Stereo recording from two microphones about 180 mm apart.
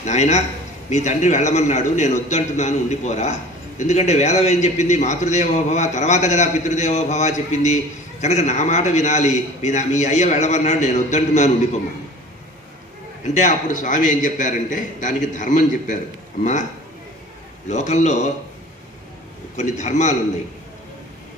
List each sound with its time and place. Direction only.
0.0 s a man's voice: 40° left (ahead or behind)
13.3 s a man's voice: 40° left (ahead or behind)
17.6 s a man's voice: 40° left (ahead or behind)
19.5 s a man's voice: 40° left (ahead or behind)